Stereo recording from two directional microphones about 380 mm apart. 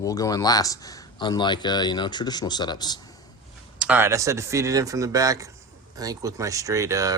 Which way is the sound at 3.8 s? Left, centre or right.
Centre.